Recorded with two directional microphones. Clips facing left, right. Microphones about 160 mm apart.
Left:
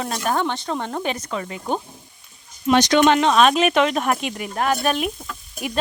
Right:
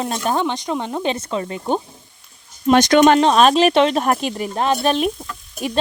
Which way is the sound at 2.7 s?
50° right (ahead or behind).